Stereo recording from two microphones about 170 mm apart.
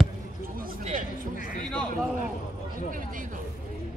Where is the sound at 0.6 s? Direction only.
55° right (ahead or behind).